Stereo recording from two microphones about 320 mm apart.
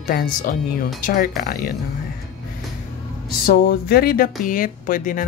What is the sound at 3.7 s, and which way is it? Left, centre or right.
A woman's voice, left.